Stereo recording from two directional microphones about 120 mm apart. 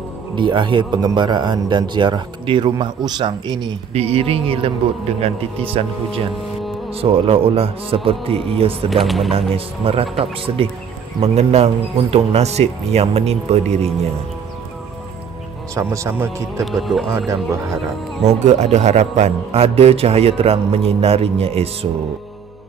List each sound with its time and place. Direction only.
0.4 s a man's voice: 40° right (ahead or behind)
3.9 s speech: 55° right (ahead or behind)
9.0 s speech: centre (ahead or behind)
9.3 s a man's voice: 55° right (ahead or behind)
15.7 s speech: 25° right (ahead or behind)
16.6 s speech: centre (ahead or behind)
17.3 s speech: 25° right (ahead or behind)
18.2 s a man's voice: 70° right (ahead or behind); by 21.6 s 55° right (ahead or behind)